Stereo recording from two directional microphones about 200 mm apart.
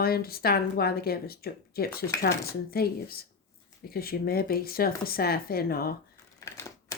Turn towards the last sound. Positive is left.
turn(degrees=15)  # may be behind; listen again after turning